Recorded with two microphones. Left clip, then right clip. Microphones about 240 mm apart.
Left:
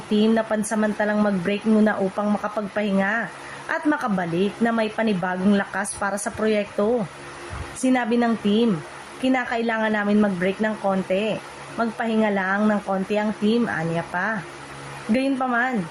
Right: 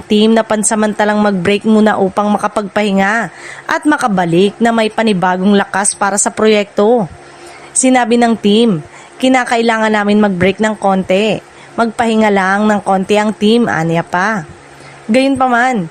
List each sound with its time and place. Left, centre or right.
0.1 s a woman's voice: right